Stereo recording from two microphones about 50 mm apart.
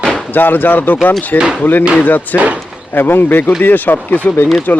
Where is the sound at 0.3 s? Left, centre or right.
Left.